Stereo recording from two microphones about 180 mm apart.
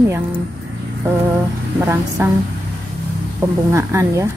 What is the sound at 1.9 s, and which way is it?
Speech, 10° right (ahead or behind).